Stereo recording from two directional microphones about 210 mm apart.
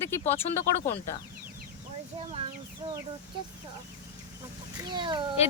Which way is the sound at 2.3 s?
25° right (ahead or behind).